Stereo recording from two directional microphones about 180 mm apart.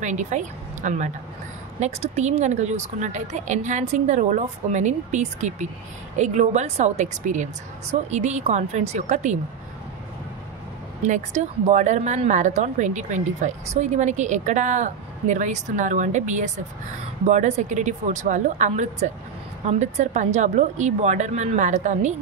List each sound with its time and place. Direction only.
0.0 s a woman's voice: 40° right (ahead or behind)
11.0 s speech: 40° right (ahead or behind)